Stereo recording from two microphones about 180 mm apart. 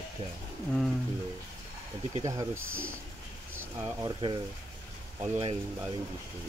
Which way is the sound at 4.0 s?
25° right (ahead or behind).